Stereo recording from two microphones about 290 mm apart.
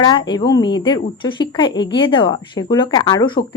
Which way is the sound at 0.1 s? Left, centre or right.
Centre.